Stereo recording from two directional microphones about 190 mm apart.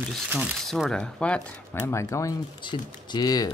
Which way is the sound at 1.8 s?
15° left (ahead or behind).